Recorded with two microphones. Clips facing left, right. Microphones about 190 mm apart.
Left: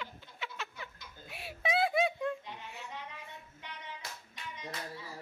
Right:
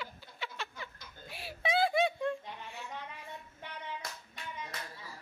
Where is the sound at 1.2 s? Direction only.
35° right (ahead or behind).